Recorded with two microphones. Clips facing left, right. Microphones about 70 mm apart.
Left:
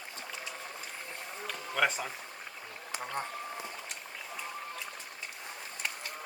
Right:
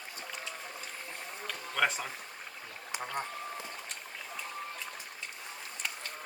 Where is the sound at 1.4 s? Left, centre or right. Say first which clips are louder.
Left 1 dB; centre.